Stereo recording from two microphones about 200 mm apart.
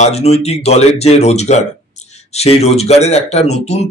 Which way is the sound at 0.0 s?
30° left (ahead or behind).